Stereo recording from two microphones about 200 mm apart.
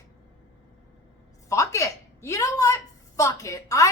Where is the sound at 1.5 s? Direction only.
15° left (ahead or behind).